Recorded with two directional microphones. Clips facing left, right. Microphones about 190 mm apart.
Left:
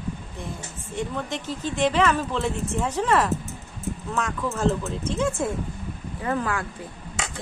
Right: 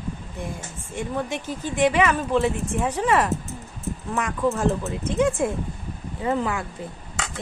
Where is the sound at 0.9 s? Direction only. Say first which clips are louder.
Right 2 dB; 10° right (ahead or behind).